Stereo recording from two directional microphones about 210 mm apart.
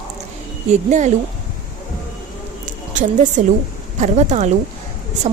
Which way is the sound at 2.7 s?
35° right (ahead or behind).